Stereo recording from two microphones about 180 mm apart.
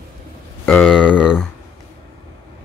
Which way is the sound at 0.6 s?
10° left (ahead or behind).